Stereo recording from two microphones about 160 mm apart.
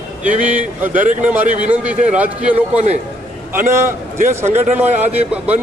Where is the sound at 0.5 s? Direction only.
10° right (ahead or behind).